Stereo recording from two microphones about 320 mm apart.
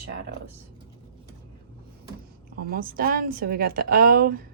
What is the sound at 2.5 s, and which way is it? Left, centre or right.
Speech, right.